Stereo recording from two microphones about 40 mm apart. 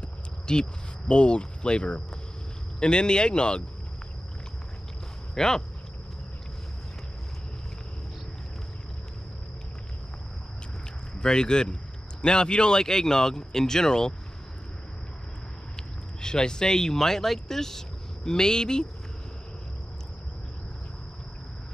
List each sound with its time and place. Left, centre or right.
0.5 s speech: left
5.3 s speech: centre
11.1 s a man's voice: centre
15.7 s speech: centre